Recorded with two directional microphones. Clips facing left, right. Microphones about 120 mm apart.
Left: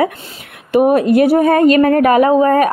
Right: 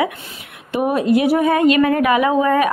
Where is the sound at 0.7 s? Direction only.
55° left (ahead or behind).